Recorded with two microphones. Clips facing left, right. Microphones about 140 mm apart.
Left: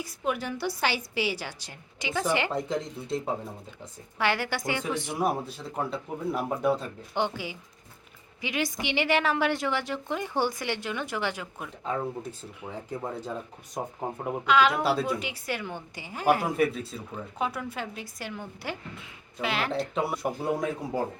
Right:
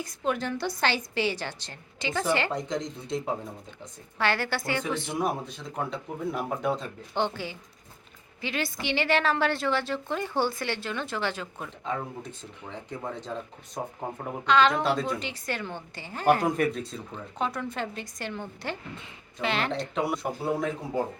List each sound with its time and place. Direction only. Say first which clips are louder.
0.0 s a woman's voice: right 1 dB; 10° left (ahead or behind)
14.4 s a woman's voice: right 1 dB; 10° left (ahead or behind)